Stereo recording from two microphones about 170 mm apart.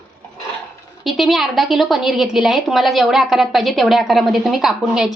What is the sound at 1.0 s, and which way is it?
A woman's voice, centre (ahead or behind).